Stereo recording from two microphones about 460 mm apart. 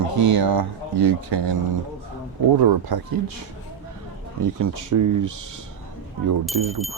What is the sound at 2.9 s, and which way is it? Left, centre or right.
Speech, right.